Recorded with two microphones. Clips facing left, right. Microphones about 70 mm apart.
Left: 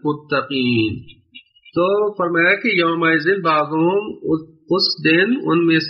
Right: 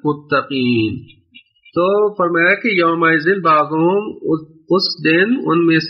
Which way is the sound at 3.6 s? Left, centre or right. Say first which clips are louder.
Right 3 dB; right.